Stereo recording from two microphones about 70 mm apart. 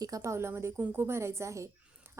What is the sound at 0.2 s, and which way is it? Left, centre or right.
A woman's voice, right.